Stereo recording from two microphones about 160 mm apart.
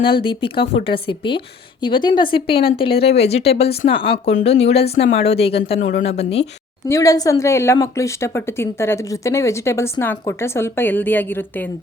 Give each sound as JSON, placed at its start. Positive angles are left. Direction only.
{"t": 0.2, "sound": "a woman's voice", "side_deg": 30}
{"t": 6.8, "sound": "speech", "side_deg": 20}